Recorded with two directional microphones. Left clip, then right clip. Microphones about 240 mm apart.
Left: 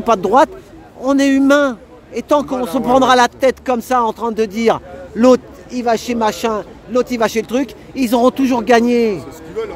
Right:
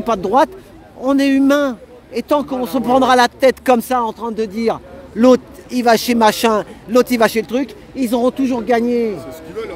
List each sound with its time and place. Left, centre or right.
0.0 s a man's voice: centre
3.9 s a man's voice: centre
5.7 s speech: centre
7.4 s speech: centre
9.6 s music: centre